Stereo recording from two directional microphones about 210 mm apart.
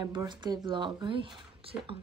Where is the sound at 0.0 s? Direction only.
20° right (ahead or behind).